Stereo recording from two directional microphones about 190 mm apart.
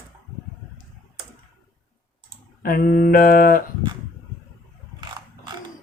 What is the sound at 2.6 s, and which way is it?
Speech, 50° left (ahead or behind).